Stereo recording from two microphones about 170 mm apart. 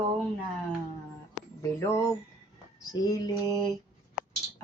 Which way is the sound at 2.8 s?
20° left (ahead or behind).